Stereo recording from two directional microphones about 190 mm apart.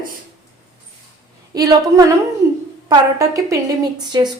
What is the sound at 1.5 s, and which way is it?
A woman's voice, 20° right (ahead or behind).